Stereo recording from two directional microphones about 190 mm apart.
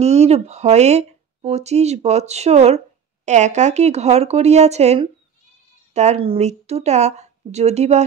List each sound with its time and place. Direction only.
0.0 s speech: 35° right (ahead or behind)